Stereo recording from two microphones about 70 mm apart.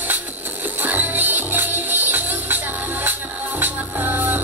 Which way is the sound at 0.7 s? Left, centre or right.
Right.